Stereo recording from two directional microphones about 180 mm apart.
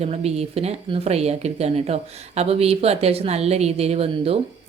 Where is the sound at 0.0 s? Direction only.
35° right (ahead or behind).